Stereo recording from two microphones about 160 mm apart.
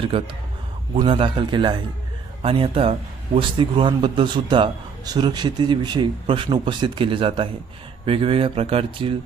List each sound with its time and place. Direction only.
0.0 s speech: 35° right (ahead or behind)